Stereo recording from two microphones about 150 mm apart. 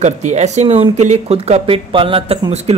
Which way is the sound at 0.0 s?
50° right (ahead or behind).